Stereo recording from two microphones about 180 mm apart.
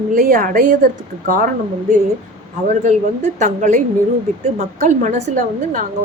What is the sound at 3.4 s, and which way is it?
Speech, 45° right (ahead or behind).